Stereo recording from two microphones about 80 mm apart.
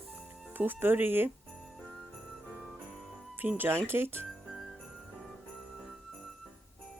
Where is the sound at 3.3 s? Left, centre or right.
Right.